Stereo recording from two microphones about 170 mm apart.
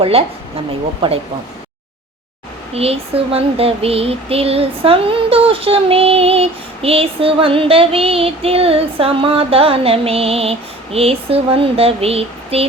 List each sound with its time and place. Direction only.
0.0 s speech: 35° right (ahead or behind)
2.7 s speech: 35° right (ahead or behind)